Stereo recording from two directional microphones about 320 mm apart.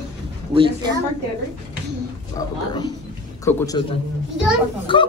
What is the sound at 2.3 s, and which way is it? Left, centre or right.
Speech, centre.